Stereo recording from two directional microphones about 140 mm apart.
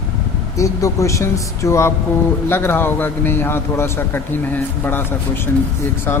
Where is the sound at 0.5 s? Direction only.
20° left (ahead or behind).